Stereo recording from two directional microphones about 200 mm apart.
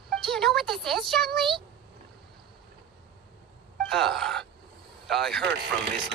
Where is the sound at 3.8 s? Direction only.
Centre (ahead or behind).